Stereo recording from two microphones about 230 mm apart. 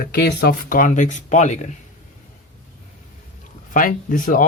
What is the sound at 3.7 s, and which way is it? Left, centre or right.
Speech, left.